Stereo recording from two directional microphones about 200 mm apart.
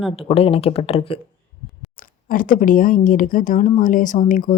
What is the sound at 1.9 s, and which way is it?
Speech, 45° left (ahead or behind).